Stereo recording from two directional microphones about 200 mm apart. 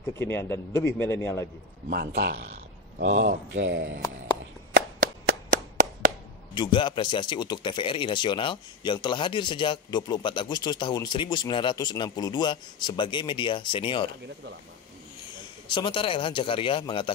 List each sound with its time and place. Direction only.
0.2 s a man's voice: 15° left (ahead or behind)
1.9 s speech: 55° right (ahead or behind)
4.7 s a sound: 80° right
6.5 s speech: 25° left (ahead or behind)
15.3 s speech: 25° left (ahead or behind)